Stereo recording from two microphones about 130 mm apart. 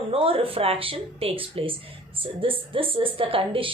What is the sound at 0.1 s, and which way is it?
Speech, 45° right (ahead or behind).